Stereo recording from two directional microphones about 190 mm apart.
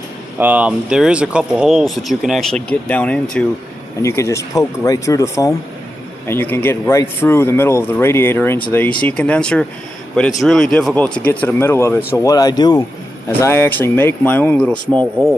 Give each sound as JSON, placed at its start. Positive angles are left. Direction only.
{"t": 0.3, "sound": "speech", "side_deg": -10}